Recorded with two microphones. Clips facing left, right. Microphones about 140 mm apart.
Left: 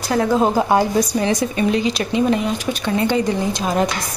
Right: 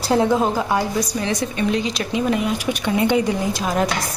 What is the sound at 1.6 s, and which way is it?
Speech, centre (ahead or behind).